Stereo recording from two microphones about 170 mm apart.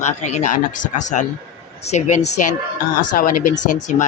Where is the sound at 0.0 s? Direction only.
40° left (ahead or behind).